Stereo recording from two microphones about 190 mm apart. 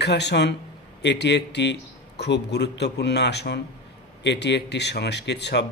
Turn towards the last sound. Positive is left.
turn(degrees=65)  # may be behind; listen again after turning